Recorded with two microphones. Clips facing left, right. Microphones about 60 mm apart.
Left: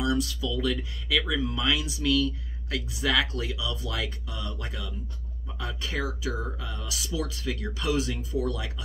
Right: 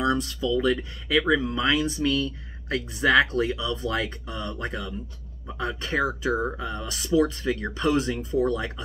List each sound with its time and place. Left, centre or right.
0.0 s speech: right